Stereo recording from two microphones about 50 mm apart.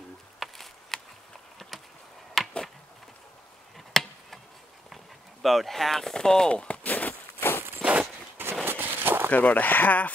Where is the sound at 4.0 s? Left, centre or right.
Centre.